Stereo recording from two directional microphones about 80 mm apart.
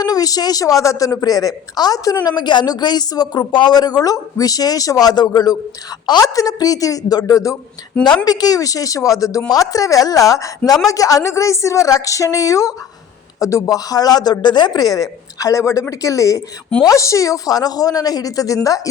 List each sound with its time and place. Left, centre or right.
0.0 s a woman's voice: left